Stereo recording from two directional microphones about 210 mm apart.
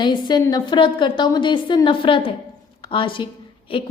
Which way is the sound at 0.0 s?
20° left (ahead or behind).